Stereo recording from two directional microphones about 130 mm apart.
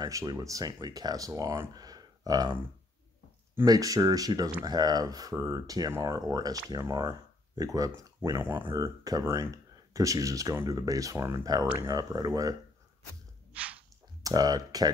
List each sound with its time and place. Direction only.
0.0 s speech: 25° right (ahead or behind)
3.6 s speech: 30° right (ahead or behind)
13.5 s a sound: 10° right (ahead or behind)
14.2 s speech: 30° right (ahead or behind)